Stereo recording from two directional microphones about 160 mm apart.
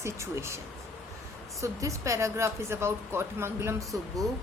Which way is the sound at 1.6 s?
20° right (ahead or behind).